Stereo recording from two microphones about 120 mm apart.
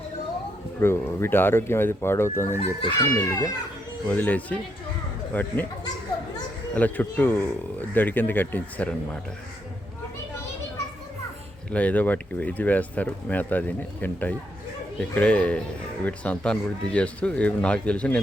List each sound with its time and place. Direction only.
0.8 s speech: 20° left (ahead or behind)
4.0 s speech: 15° left (ahead or behind)
6.7 s speech: 15° left (ahead or behind)
11.7 s speech: 10° left (ahead or behind)